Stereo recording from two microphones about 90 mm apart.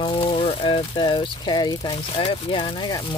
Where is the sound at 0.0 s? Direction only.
70° left (ahead or behind); by 1.8 s 50° left (ahead or behind).